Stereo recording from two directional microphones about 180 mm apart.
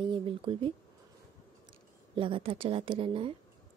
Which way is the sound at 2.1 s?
30° right (ahead or behind).